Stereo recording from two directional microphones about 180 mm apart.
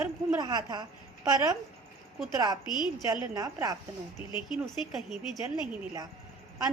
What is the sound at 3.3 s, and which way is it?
Speech, 20° right (ahead or behind).